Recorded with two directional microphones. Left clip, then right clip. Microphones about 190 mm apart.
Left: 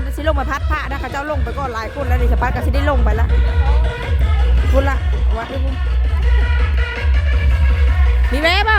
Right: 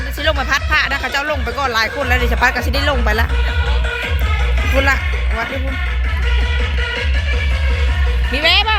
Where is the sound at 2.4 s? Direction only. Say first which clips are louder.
Right 5 dB; 15° left (ahead or behind).